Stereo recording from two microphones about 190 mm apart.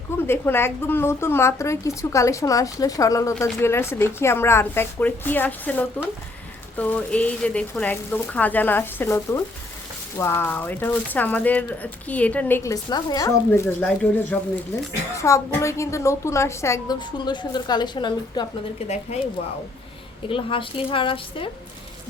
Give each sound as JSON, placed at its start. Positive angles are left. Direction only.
{"t": 0.3, "sound": "speech", "side_deg": 10}
{"t": 13.8, "sound": "speech", "side_deg": 5}
{"t": 18.9, "sound": "a woman's voice", "side_deg": 35}